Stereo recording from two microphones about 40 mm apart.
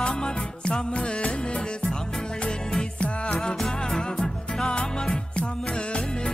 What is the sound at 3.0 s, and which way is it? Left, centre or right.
Music, left.